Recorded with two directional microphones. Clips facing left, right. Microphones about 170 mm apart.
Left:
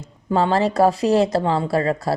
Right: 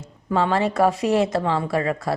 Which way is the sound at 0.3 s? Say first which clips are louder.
Left 2 dB; 30° left (ahead or behind).